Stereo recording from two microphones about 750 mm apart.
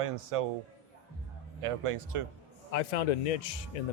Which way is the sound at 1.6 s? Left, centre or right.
Right.